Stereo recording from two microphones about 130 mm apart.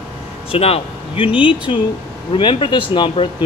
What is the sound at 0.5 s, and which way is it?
Speech, 50° left (ahead or behind).